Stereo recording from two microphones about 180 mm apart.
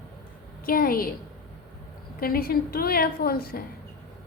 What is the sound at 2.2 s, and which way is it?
A woman's voice, 55° left (ahead or behind).